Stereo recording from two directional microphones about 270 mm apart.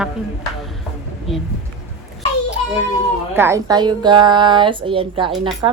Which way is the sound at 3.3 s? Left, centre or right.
Centre.